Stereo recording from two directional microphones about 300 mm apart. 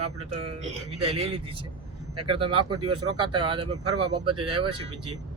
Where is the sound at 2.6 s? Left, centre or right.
Right.